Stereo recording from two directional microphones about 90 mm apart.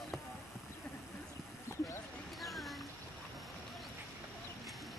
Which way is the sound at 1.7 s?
30° left (ahead or behind).